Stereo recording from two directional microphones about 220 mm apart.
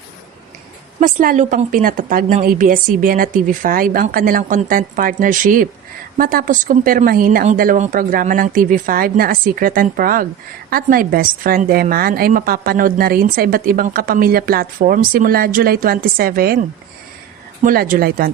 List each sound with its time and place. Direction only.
0.9 s a woman's voice: 40° right (ahead or behind)
17.6 s a woman's voice: 40° right (ahead or behind)